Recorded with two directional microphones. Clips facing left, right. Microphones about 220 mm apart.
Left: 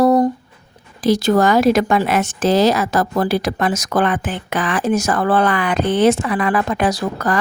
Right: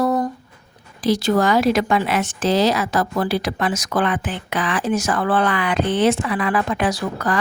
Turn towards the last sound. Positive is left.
turn(degrees=40)  # may be behind; listen again after turning